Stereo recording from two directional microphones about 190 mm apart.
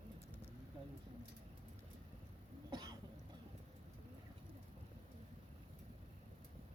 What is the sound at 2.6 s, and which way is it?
Cough, 20° right (ahead or behind).